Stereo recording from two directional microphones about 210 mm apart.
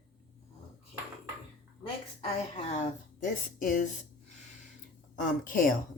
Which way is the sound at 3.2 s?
40° left (ahead or behind).